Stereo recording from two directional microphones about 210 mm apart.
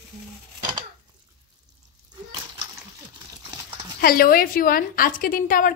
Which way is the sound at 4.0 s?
45° left (ahead or behind).